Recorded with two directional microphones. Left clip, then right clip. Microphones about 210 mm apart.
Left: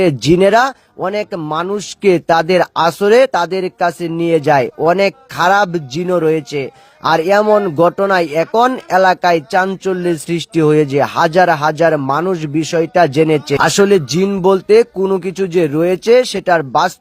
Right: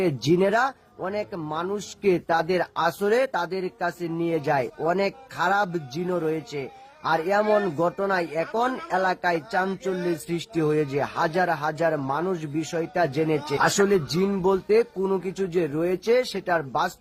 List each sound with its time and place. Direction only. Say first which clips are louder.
0.0 s speech: left 11 dB; 40° left (ahead or behind)